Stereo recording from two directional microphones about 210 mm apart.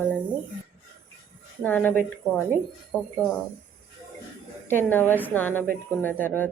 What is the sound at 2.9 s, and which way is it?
Speech, 10° left (ahead or behind).